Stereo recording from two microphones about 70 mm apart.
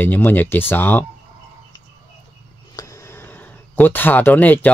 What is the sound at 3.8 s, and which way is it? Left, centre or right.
Speech, left.